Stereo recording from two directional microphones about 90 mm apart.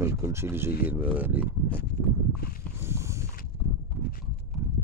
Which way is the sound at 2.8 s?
30° right (ahead or behind).